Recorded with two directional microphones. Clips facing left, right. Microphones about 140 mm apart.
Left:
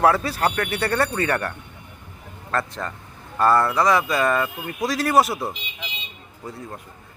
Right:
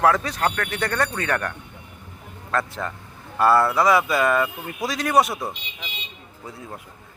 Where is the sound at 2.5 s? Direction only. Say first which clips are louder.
Right 1 dB; 5° right (ahead or behind).